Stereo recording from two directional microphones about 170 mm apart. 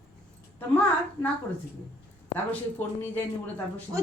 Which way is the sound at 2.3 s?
10° left (ahead or behind).